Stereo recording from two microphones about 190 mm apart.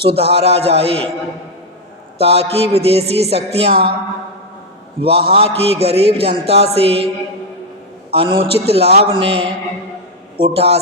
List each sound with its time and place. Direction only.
0.0 s a man's voice: 30° right (ahead or behind)
2.1 s a man's voice: 30° right (ahead or behind)
4.9 s a man's voice: 30° right (ahead or behind)
8.1 s a man's voice: 30° right (ahead or behind)